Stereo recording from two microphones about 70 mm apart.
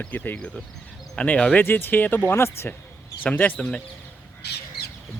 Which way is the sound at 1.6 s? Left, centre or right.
Left.